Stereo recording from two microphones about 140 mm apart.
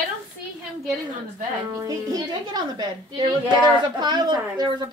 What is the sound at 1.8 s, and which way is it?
Speech, 25° right (ahead or behind).